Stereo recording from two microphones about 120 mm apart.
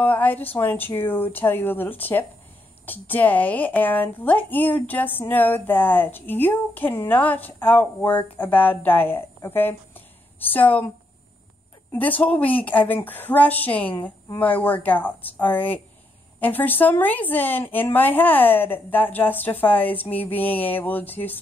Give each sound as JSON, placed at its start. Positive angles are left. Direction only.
{"t": 0.0, "sound": "speech", "side_deg": 15}
{"t": 11.9, "sound": "speech", "side_deg": 15}